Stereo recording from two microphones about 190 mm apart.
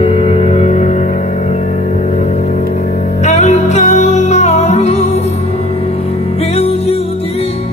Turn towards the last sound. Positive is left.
turn(degrees=30)  # may be behind; listen again after turning